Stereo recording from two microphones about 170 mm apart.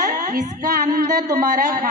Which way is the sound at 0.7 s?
65° right (ahead or behind).